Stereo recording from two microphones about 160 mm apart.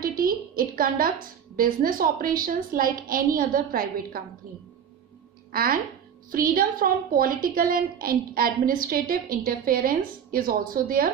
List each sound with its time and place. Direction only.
0.0 s a sound: 65° right (ahead or behind)
1.6 s a woman's voice: 60° right (ahead or behind)
5.5 s a woman's voice: 65° right (ahead or behind)